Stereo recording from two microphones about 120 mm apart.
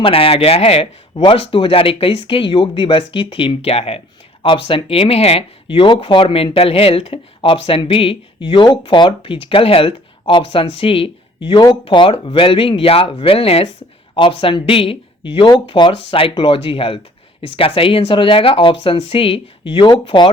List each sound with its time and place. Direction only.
0.0 s speech: 50° left (ahead or behind)